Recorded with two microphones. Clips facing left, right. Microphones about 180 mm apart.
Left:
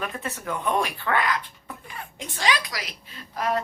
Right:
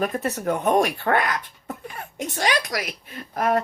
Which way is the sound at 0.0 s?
40° right (ahead or behind).